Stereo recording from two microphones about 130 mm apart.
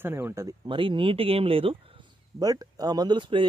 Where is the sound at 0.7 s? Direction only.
40° right (ahead or behind).